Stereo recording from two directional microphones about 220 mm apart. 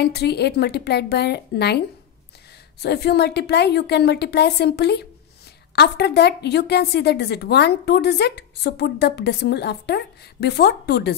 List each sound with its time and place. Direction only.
0.0 s a woman's voice: 50° left (ahead or behind)
2.8 s a woman's voice: 50° left (ahead or behind)